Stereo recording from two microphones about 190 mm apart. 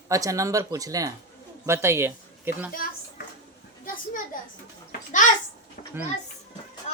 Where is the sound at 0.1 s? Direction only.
15° right (ahead or behind).